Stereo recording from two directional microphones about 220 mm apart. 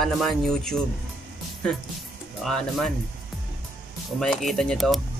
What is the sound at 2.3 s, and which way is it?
Speech, centre (ahead or behind).